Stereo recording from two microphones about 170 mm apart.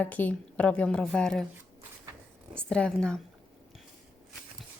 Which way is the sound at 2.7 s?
5° left (ahead or behind).